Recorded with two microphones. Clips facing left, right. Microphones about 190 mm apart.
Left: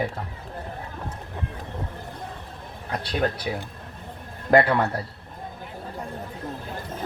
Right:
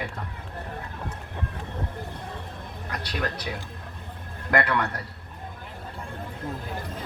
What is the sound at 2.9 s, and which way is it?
Speech, 30° left (ahead or behind).